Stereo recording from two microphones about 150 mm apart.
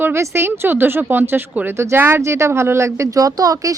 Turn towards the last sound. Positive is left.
turn(degrees=-25)  # may be behind; listen again after turning